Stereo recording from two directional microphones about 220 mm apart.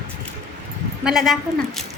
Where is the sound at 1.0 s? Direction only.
Centre (ahead or behind).